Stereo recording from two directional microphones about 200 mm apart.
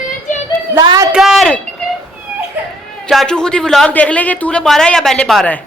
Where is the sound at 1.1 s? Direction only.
Centre (ahead or behind).